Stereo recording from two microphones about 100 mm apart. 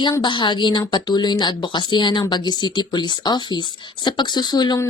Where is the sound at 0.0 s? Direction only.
50° left (ahead or behind).